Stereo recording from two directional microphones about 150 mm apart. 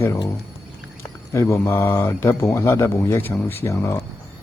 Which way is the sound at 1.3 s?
20° left (ahead or behind).